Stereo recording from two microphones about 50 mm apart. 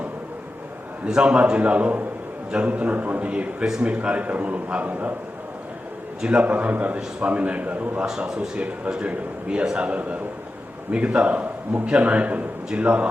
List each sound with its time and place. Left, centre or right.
1.1 s a man's voice: right
6.2 s a man's voice: right
8.3 s a man's voice: centre